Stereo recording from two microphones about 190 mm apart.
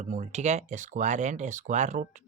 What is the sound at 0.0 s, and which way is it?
Speech, 35° right (ahead or behind).